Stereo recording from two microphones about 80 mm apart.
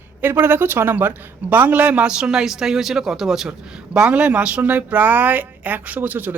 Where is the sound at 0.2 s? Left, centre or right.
Right.